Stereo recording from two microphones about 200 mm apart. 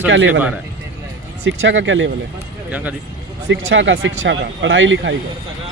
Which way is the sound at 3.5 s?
70° right (ahead or behind).